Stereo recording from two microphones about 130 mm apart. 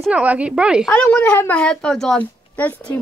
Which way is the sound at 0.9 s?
10° left (ahead or behind).